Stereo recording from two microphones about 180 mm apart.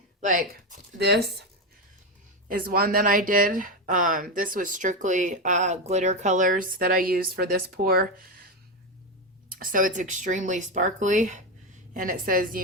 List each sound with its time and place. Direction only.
0.2 s speech: 45° right (ahead or behind)
0.9 s speech: 65° right (ahead or behind)
2.5 s speech: 55° right (ahead or behind)
9.5 s speech: 50° right (ahead or behind)